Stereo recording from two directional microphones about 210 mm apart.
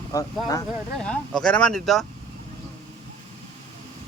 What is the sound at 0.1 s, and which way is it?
Speech, 15° left (ahead or behind).